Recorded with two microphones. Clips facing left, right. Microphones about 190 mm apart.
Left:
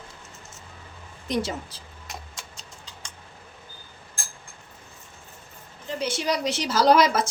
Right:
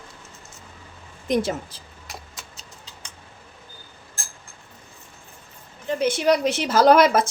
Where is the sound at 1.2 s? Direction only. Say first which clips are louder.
Right 5 dB; 55° right (ahead or behind).